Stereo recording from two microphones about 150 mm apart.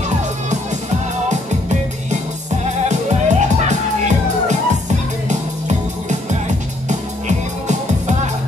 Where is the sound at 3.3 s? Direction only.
50° right (ahead or behind).